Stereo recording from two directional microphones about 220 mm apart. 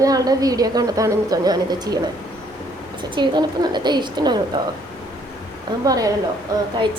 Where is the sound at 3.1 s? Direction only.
20° right (ahead or behind).